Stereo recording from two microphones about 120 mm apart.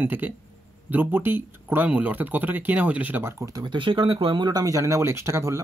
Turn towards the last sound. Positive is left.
turn(degrees=-25)  # may be behind; listen again after turning